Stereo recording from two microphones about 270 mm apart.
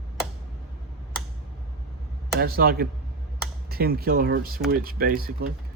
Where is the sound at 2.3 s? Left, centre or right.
Right.